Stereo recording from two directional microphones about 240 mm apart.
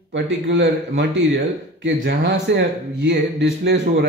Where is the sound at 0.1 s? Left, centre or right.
Right.